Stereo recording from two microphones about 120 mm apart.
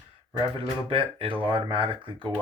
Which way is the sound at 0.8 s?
50° right (ahead or behind).